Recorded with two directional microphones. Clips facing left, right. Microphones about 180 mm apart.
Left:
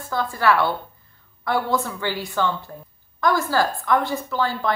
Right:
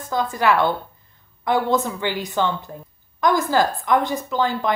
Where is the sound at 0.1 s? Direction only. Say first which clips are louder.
Right 1 dB; 15° right (ahead or behind).